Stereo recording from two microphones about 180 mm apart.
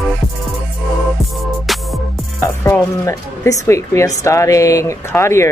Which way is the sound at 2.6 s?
15° left (ahead or behind).